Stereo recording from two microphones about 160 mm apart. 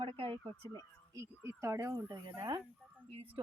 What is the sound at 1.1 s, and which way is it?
Speech, 20° right (ahead or behind).